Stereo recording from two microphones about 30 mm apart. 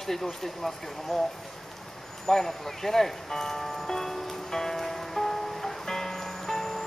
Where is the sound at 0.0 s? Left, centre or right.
Centre.